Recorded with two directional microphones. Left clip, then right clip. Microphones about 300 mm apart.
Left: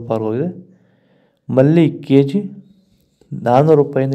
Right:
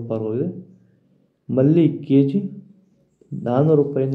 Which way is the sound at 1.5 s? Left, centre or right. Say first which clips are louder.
Left 4 dB; left.